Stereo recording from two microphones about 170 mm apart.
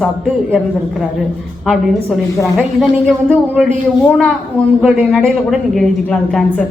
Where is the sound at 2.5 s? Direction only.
5° left (ahead or behind).